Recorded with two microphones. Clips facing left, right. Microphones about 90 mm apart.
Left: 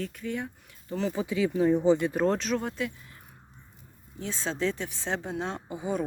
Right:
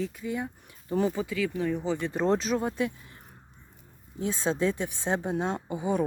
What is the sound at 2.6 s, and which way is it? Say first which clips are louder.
Speech: right 3 dB; 20° right (ahead or behind).